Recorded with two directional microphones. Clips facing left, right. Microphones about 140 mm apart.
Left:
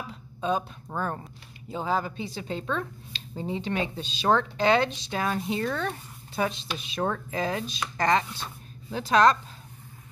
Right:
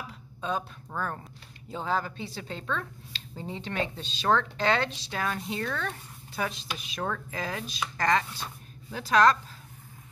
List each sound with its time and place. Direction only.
0.4 s speech: 20° left (ahead or behind)
1.7 s speech: 10° left (ahead or behind)